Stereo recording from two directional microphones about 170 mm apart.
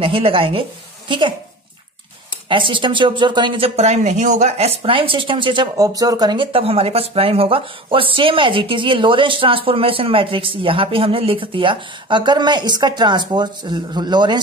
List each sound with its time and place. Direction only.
0.0 s a woman's voice: 30° right (ahead or behind)
2.5 s speech: 30° right (ahead or behind)